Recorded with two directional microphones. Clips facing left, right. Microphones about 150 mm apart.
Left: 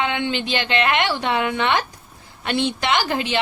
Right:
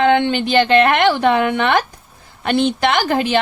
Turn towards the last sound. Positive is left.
turn(degrees=-50)  # may be behind; listen again after turning